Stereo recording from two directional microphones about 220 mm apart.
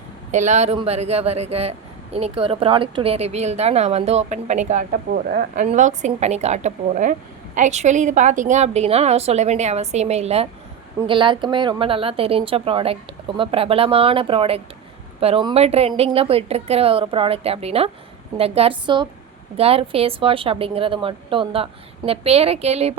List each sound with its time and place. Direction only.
0.3 s a man's voice: 35° right (ahead or behind)